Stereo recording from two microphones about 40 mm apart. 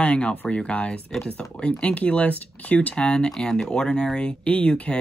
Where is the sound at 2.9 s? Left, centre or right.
Left.